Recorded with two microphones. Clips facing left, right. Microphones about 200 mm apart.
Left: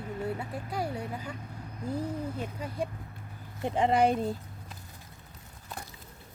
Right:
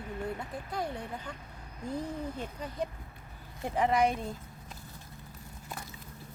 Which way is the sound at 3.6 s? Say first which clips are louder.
Left 2 dB; 25° left (ahead or behind).